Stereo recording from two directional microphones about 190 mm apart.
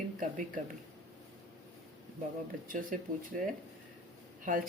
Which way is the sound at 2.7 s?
45° right (ahead or behind).